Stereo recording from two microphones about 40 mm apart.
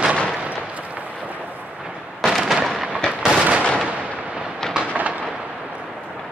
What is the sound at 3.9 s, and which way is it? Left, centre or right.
Artillery fire, right.